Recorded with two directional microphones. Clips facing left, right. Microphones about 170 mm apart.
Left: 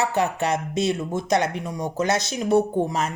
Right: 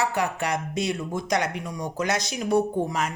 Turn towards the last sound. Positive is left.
turn(degrees=25)  # may be behind; listen again after turning